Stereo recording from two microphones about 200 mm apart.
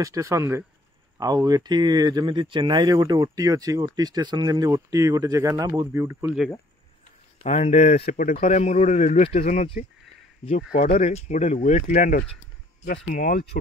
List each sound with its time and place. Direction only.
0.0 s speech: 15° right (ahead or behind)
7.4 s speech: 35° left (ahead or behind)